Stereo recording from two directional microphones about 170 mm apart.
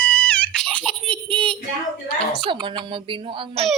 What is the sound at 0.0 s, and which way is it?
Giggle, 10° left (ahead or behind).